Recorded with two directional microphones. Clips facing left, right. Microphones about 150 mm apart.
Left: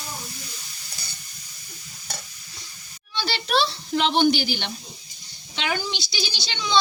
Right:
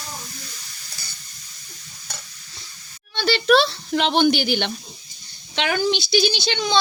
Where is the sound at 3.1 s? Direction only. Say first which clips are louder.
Right 7 dB; 60° right (ahead or behind).